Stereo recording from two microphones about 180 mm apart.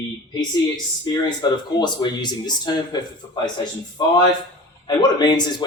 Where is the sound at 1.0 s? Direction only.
20° left (ahead or behind).